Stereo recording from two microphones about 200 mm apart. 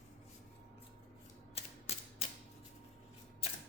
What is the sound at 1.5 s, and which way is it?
Mechanisms, 30° left (ahead or behind).